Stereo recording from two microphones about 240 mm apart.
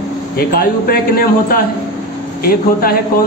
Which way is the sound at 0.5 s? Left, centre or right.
Left.